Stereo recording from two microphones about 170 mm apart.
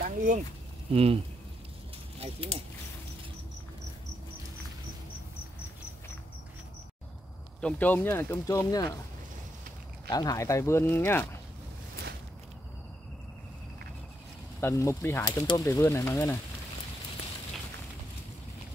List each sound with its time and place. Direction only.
0.0 s a sound: 50° right (ahead or behind)
0.9 s speech: 35° right (ahead or behind)
7.6 s speech: 10° left (ahead or behind)
10.0 s speech: 20° left (ahead or behind)
14.6 s speech: 15° left (ahead or behind)